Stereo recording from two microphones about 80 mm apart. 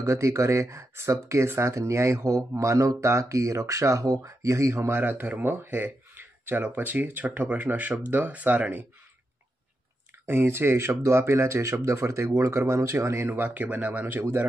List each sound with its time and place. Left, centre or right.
0.0 s speech: right
10.2 s speech: right
13.3 s speech: right